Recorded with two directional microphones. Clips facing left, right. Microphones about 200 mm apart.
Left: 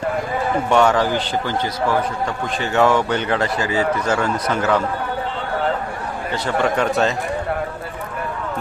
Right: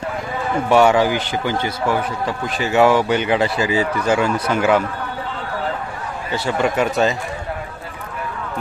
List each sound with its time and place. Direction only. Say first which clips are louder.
0.7 s speech: right 3 dB; 10° right (ahead or behind)
6.3 s speech: right 1 dB; 5° right (ahead or behind)